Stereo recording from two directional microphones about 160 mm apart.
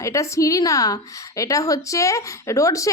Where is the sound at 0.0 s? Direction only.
20° left (ahead or behind).